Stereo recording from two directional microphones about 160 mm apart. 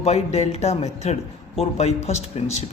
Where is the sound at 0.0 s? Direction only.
45° left (ahead or behind).